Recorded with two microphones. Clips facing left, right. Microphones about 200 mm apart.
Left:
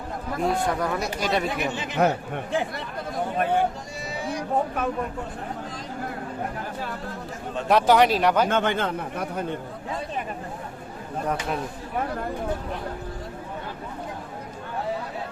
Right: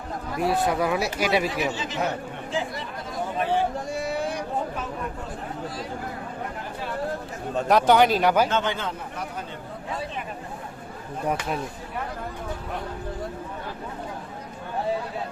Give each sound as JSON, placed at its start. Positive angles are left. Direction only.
{"t": 0.3, "sound": "speech", "side_deg": -5}
{"t": 1.5, "sound": "speech", "side_deg": 55}
{"t": 3.9, "sound": "a sound", "side_deg": -55}
{"t": 7.7, "sound": "speech", "side_deg": 0}
{"t": 8.4, "sound": "speech", "side_deg": 55}